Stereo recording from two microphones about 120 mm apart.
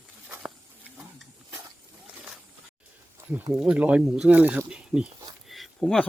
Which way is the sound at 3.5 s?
10° right (ahead or behind).